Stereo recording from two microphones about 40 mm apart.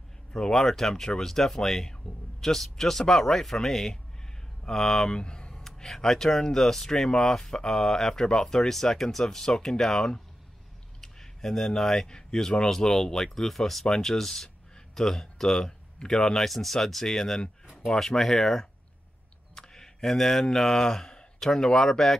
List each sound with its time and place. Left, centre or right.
0.3 s speech: centre
5.2 s a sound: left
5.5 s speech: centre